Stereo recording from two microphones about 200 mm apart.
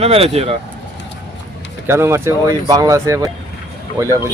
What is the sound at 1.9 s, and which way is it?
Speech, 15° right (ahead or behind).